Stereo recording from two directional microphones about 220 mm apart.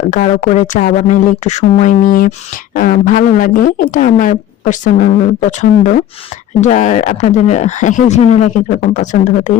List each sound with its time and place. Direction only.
0.1 s speech: 35° left (ahead or behind)